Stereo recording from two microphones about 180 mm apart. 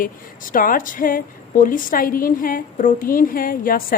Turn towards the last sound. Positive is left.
turn(degrees=50)  # may be behind; listen again after turning